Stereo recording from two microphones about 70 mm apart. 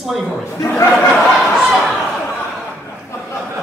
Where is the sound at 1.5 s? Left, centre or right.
Centre.